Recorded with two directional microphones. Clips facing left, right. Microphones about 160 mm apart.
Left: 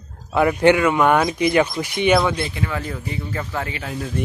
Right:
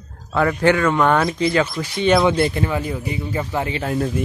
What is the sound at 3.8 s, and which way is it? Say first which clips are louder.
Speech: right 7 dB; 55° right (ahead or behind).